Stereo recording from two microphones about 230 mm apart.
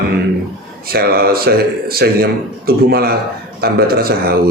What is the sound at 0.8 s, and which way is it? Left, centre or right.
Speech, right.